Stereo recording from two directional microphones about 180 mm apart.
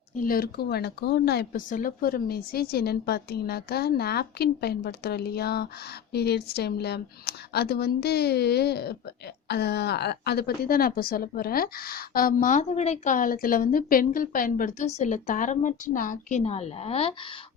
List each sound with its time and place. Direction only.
0.2 s a woman's voice: 55° left (ahead or behind); by 17.2 s 35° left (ahead or behind)